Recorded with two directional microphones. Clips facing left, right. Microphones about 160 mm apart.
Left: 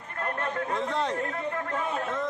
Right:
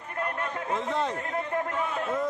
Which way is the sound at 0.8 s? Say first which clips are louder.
Right 1 dB; centre (ahead or behind).